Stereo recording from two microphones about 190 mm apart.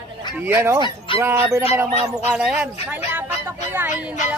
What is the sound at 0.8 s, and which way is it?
Speech, 25° left (ahead or behind).